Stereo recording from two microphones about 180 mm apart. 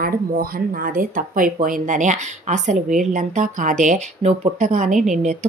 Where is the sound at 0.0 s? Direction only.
55° right (ahead or behind).